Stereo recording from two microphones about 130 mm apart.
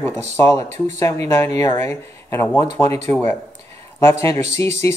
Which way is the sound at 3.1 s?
15° left (ahead or behind).